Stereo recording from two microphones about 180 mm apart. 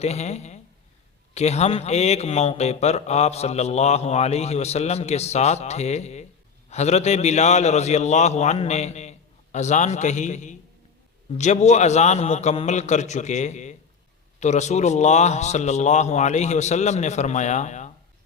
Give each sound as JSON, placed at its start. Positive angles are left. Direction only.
{"t": 0.0, "sound": "a man's voice", "side_deg": 35}